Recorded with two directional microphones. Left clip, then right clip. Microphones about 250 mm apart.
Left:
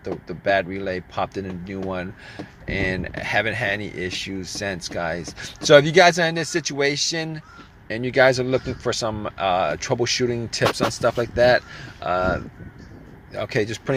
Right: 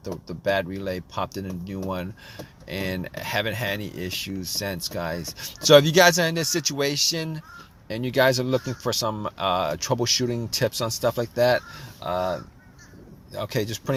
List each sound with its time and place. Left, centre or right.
0.0 s speech: right